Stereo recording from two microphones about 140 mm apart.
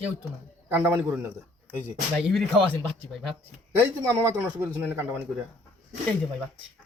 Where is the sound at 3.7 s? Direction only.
15° right (ahead or behind).